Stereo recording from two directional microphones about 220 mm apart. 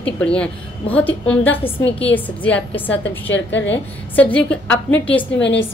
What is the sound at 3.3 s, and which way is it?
Speech, 55° left (ahead or behind).